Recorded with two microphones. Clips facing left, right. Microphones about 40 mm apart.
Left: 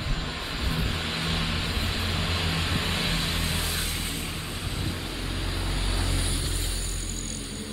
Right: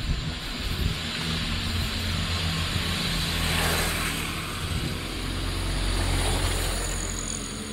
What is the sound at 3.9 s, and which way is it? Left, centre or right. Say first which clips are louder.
Vehicle: right 4 dB; right.